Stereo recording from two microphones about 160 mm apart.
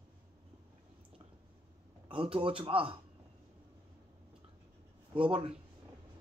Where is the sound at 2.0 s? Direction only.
30° right (ahead or behind).